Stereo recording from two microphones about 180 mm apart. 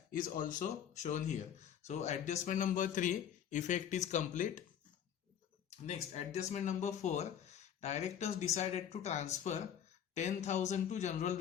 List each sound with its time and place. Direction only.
0.1 s a man's voice: 50° left (ahead or behind)
5.7 s speech: 35° left (ahead or behind)